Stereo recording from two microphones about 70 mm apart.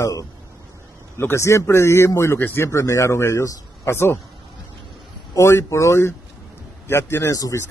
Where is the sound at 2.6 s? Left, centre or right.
Left.